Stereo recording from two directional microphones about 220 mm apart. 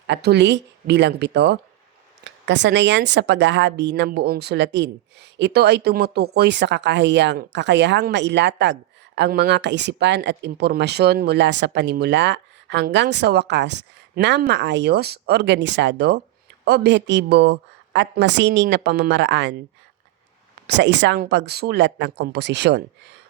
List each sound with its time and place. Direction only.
0.1 s speech: 50° right (ahead or behind)
20.7 s speech: 55° right (ahead or behind)